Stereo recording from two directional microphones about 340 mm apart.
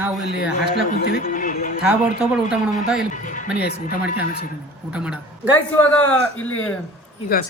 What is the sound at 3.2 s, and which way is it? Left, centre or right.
Speech, left.